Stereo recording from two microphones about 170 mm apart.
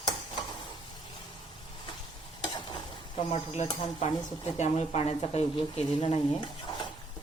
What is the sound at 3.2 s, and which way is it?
Speech, 40° left (ahead or behind).